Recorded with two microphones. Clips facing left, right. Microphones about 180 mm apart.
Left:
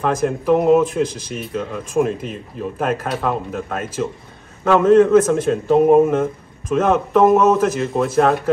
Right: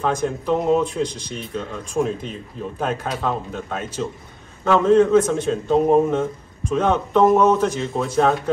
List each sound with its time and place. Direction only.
0.0 s a man's voice: 5° left (ahead or behind)